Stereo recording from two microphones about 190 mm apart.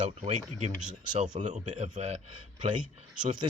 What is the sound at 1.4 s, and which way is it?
Speech, 40° right (ahead or behind).